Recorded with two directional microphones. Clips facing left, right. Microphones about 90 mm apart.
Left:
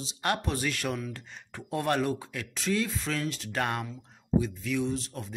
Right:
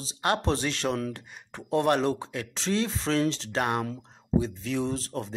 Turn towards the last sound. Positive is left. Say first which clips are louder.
# right 2 dB
turn(degrees=-35)  # may be behind; listen again after turning